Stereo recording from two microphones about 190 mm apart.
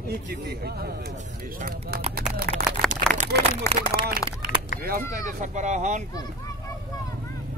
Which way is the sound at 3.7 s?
15° left (ahead or behind).